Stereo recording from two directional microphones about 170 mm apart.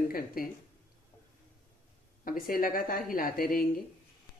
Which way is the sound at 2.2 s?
55° left (ahead or behind).